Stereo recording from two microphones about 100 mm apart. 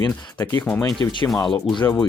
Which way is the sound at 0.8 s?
45° left (ahead or behind).